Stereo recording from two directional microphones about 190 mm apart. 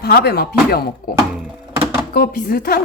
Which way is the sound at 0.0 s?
55° left (ahead or behind).